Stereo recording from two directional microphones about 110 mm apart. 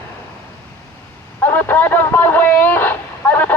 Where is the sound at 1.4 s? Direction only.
20° left (ahead or behind).